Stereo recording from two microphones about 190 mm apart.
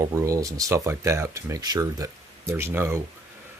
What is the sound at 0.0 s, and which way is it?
Speech, 15° right (ahead or behind).